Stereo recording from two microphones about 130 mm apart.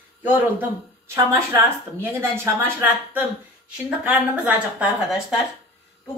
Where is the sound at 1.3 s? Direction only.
20° right (ahead or behind).